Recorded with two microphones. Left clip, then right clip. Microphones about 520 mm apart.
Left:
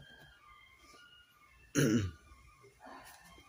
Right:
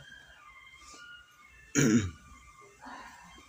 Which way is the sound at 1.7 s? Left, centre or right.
Left.